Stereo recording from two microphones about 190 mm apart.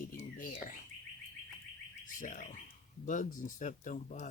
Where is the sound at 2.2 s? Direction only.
45° left (ahead or behind).